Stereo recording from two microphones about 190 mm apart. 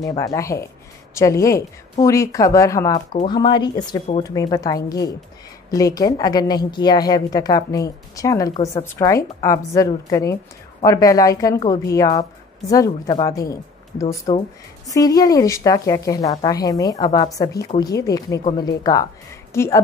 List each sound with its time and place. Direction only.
0.0 s a woman's voice: 20° left (ahead or behind)
14.3 s a woman's voice: 30° left (ahead or behind)
14.9 s a woman's voice: 20° left (ahead or behind)